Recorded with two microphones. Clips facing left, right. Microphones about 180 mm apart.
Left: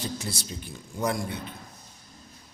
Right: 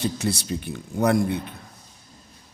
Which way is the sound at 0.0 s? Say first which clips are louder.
Right 8 dB; 70° right (ahead or behind).